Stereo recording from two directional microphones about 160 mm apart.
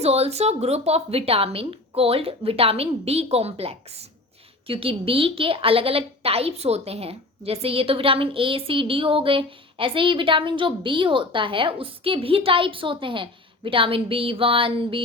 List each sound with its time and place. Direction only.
0.0 s a woman's voice: 40° right (ahead or behind)